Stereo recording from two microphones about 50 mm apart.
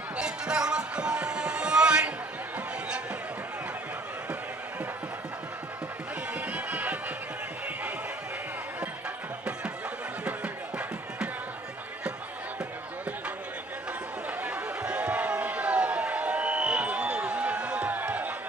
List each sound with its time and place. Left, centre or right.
0.2 s music: centre
6.3 s music: right
10.2 s music: right
14.4 s a sound: right